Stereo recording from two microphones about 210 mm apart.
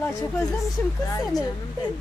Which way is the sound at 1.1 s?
15° left (ahead or behind).